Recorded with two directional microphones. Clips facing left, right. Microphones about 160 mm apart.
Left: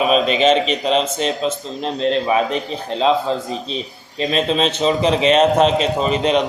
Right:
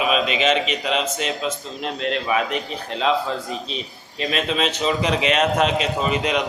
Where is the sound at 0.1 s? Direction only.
35° left (ahead or behind).